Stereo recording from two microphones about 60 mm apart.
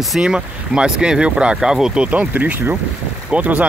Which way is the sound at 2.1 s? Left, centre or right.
Right.